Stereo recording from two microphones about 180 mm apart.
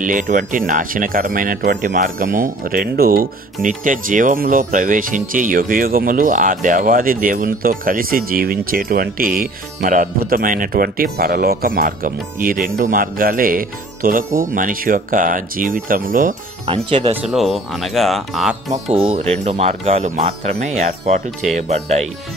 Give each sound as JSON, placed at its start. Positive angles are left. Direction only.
{"t": 0.0, "sound": "speech", "side_deg": -45}
{"t": 16.6, "sound": "speech", "side_deg": -30}
{"t": 17.1, "sound": "speech", "side_deg": -5}
{"t": 18.9, "sound": "speech", "side_deg": -35}